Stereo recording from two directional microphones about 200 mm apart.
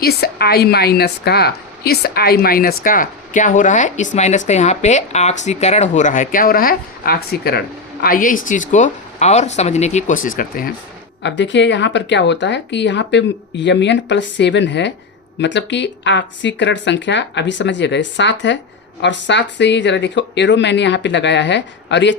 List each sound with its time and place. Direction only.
0.0 s a woman's voice: 50° left (ahead or behind)
11.2 s speech: 65° left (ahead or behind)